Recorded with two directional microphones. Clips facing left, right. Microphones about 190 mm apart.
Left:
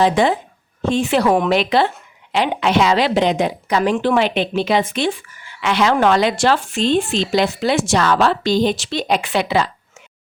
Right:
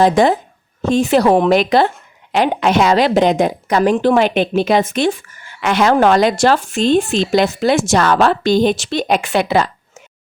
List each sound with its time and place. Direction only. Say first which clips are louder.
0.0 s a woman's voice: right 3 dB; 45° right (ahead or behind)